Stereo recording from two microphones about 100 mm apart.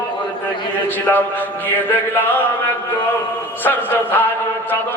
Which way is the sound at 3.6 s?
20° left (ahead or behind).